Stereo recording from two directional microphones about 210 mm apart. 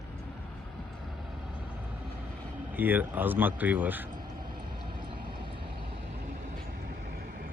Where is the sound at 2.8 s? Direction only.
10° right (ahead or behind).